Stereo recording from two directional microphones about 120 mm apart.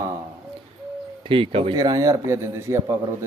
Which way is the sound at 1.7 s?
30° right (ahead or behind).